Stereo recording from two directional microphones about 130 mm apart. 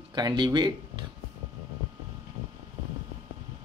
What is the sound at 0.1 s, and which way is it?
Speech, 35° right (ahead or behind).